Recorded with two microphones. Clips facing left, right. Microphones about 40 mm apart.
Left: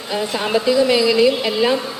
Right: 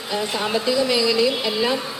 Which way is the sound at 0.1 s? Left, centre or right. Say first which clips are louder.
Left 3 dB; centre.